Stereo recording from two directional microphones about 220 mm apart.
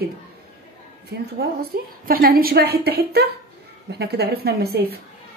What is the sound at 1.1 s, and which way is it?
A woman's voice, 45° right (ahead or behind).